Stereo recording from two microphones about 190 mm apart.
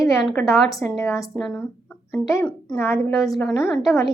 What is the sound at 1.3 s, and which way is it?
A woman's voice, 5° left (ahead or behind).